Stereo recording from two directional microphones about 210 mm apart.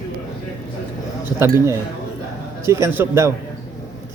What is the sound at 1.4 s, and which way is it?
A man's voice, 10° right (ahead or behind).